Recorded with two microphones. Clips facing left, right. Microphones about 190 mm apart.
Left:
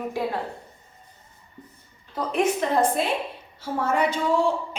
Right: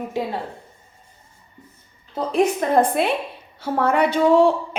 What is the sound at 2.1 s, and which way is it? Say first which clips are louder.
Speech: right 3 dB; 30° right (ahead or behind).